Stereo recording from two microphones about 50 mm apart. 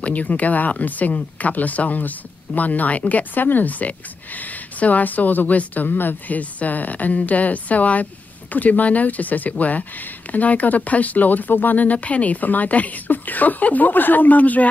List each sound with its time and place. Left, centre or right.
0.0 s speech: left